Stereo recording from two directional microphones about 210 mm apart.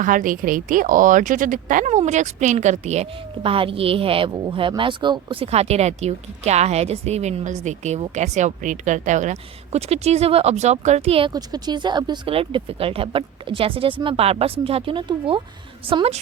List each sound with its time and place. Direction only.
0.0 s a woman's voice: 40° right (ahead or behind)